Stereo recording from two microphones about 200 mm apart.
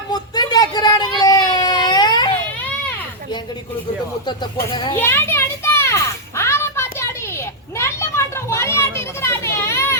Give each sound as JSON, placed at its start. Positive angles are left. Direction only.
{"t": 0.1, "sound": "a sound", "side_deg": 20}
{"t": 4.3, "sound": "speech", "side_deg": 20}
{"t": 4.9, "sound": "children playing", "side_deg": 10}